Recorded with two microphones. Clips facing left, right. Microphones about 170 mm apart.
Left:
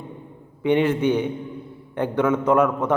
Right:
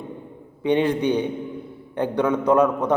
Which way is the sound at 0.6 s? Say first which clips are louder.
Left 1 dB; 15° right (ahead or behind).